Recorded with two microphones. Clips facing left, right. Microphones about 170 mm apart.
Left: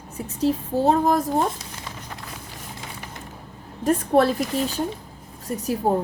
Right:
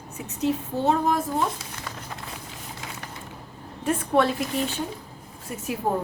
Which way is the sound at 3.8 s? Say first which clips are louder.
Left 4 dB; 40° left (ahead or behind).